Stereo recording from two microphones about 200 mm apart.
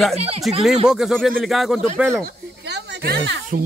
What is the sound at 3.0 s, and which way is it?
Speech, 60° right (ahead or behind).